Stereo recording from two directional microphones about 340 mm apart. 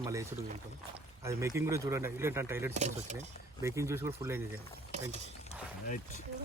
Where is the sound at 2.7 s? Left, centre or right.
Centre.